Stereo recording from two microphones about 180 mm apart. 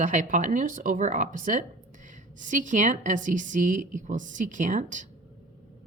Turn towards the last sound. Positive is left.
turn(degrees=-45)  # may be behind; listen again after turning